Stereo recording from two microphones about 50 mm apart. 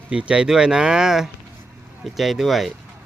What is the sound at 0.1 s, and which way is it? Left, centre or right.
Speech, centre.